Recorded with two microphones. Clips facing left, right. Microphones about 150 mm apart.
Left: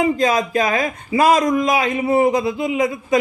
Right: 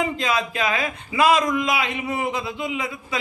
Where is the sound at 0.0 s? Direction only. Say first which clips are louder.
Left 6 dB; 40° left (ahead or behind).